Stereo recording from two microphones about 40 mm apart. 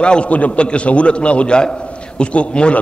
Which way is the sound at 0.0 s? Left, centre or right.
Left.